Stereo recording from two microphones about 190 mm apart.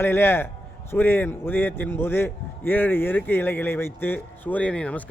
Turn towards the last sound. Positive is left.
turn(degrees=5)  # may be behind; listen again after turning